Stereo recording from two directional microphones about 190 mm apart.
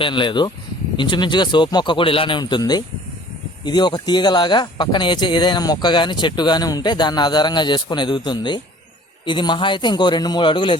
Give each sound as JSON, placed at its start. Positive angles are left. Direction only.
{"t": 0.0, "sound": "speech", "side_deg": 25}